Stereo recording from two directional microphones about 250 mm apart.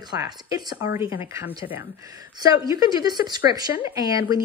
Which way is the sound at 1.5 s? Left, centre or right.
Left.